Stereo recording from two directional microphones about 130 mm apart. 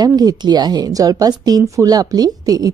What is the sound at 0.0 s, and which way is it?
Speech, 30° right (ahead or behind).